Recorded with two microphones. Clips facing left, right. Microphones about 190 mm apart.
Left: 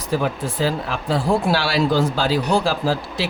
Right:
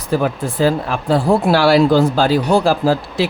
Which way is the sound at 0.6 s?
50° right (ahead or behind).